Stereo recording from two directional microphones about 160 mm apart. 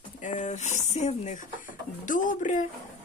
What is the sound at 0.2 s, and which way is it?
Speech, 50° left (ahead or behind).